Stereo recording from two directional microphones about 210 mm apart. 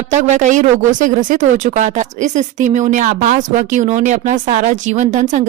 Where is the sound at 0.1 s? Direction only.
35° right (ahead or behind).